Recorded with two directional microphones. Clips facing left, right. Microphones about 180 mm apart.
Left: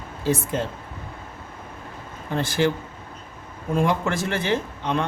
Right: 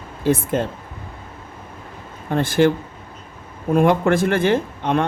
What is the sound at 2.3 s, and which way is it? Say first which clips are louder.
Speech: right 6 dB; 55° right (ahead or behind).